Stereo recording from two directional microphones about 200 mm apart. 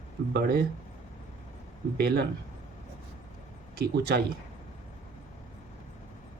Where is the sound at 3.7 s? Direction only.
55° right (ahead or behind).